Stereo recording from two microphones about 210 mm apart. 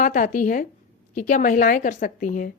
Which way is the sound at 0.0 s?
40° left (ahead or behind).